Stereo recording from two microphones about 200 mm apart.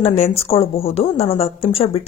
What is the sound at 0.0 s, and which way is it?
Speech, 30° left (ahead or behind).